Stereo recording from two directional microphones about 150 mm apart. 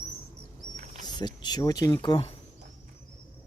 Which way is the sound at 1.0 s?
30° left (ahead or behind).